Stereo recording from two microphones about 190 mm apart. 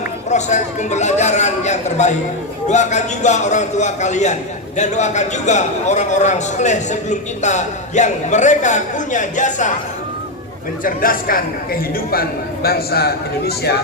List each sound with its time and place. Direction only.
0.3 s a man's voice: 40° left (ahead or behind)
10.8 s a man's voice: 50° left (ahead or behind)